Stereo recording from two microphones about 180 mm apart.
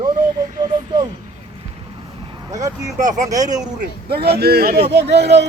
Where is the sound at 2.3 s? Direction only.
20° right (ahead or behind).